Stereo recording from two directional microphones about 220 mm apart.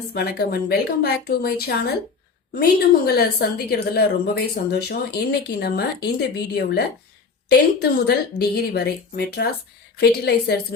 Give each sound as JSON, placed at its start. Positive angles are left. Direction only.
{"t": 0.1, "sound": "a woman's voice", "side_deg": 45}